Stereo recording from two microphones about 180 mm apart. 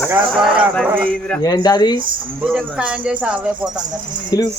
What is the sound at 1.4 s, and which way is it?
Speech, 20° left (ahead or behind).